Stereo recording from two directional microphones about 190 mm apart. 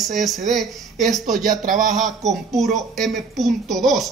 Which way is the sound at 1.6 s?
45° right (ahead or behind).